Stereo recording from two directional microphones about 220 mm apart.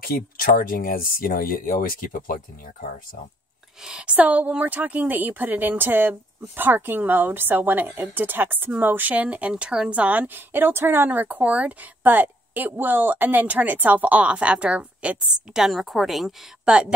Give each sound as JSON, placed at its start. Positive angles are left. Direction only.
{"t": 0.0, "sound": "speech", "side_deg": 40}
{"t": 3.8, "sound": "a woman's voice", "side_deg": -5}